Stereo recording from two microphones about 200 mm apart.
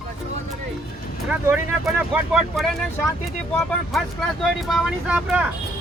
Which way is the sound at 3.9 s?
Centre (ahead or behind).